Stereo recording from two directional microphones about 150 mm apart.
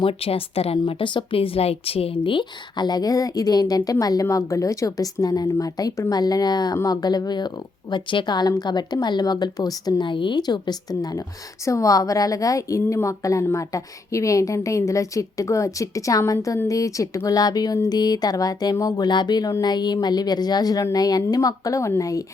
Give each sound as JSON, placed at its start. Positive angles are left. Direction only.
{"t": 0.0, "sound": "a woman's voice", "side_deg": 40}